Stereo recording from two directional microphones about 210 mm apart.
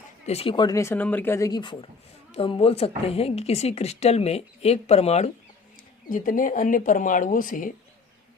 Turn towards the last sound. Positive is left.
turn(degrees=40)  # may be behind; listen again after turning